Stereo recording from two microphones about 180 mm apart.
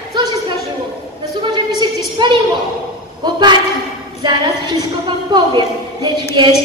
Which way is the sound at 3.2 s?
25° right (ahead or behind).